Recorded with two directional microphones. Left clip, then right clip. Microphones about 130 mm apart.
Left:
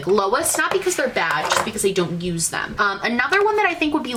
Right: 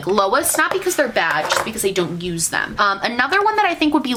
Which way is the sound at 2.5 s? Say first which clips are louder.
Right 4 dB; 25° right (ahead or behind).